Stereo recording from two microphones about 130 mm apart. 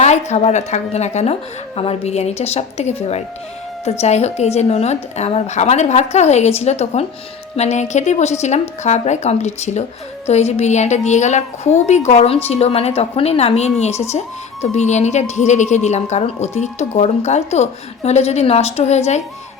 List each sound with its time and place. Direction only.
0.0 s a woman's voice: 60° left (ahead or behind)